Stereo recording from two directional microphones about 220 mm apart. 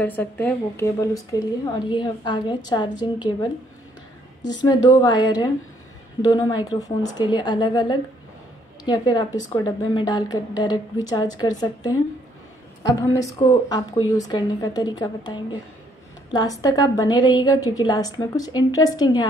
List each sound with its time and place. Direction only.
0.0 s a woman's voice: 10° left (ahead or behind)
4.6 s a woman's voice: 15° left (ahead or behind)